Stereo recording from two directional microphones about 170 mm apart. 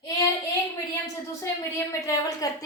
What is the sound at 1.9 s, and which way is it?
Speech, 20° left (ahead or behind).